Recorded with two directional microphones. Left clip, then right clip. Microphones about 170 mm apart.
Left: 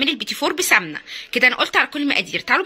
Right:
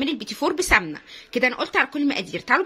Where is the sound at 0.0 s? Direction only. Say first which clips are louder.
Left 4 dB; 10° right (ahead or behind).